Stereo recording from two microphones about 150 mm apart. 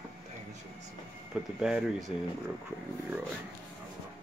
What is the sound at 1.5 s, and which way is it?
Speech, 5° right (ahead or behind).